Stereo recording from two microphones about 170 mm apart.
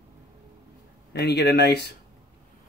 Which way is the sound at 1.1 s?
75° left (ahead or behind).